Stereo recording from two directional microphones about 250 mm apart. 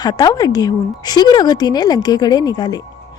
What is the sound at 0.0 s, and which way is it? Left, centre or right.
Speech, centre.